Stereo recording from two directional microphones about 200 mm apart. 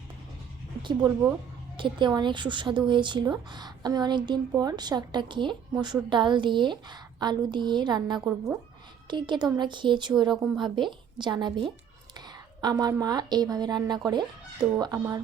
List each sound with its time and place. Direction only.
0.8 s a woman's voice: 25° right (ahead or behind)
10.3 s a woman's voice: 5° right (ahead or behind)
10.6 s a woman's voice: 25° right (ahead or behind)